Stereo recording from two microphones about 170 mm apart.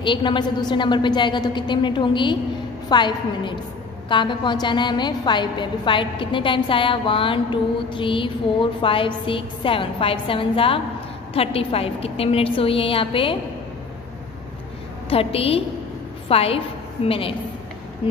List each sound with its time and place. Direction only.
0.0 s a woman's voice: 30° left (ahead or behind)
15.0 s a woman's voice: 35° left (ahead or behind)